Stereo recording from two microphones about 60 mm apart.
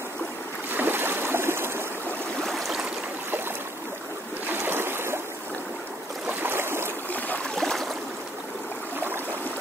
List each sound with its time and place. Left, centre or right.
0.7 s boat: right
2.4 s stream: centre
4.5 s boat: right
6.4 s a sound: right
7.2 s stream: left
7.5 s stream: centre